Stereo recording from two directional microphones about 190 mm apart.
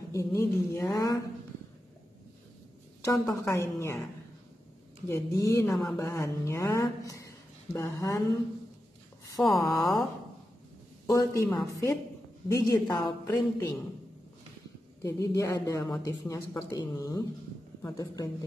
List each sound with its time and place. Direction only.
0.1 s speech: 15° left (ahead or behind)
3.1 s speech: 15° left (ahead or behind)
5.0 s speech: 15° left (ahead or behind)
9.2 s a sound: 20° left (ahead or behind)
9.5 s a woman's voice: centre (ahead or behind)
11.1 s a woman's voice: 15° left (ahead or behind)
15.0 s a woman's voice: 15° left (ahead or behind)